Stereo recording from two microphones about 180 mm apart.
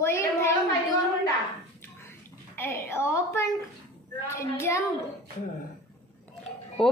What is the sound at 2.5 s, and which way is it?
A woman's voice, 15° left (ahead or behind).